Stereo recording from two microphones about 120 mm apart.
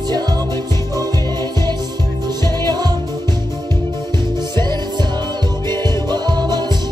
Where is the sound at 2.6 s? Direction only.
35° right (ahead or behind).